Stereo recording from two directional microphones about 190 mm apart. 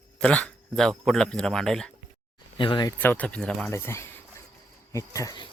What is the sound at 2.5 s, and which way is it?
Speech, 25° left (ahead or behind).